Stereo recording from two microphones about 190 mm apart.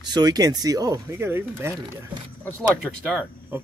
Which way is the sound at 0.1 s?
20° right (ahead or behind).